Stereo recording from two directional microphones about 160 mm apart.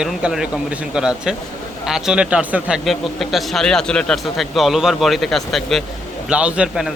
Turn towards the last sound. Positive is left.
turn(degrees=-5)  # may be behind; listen again after turning